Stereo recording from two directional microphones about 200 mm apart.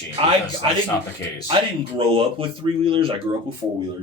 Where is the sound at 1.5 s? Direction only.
25° right (ahead or behind).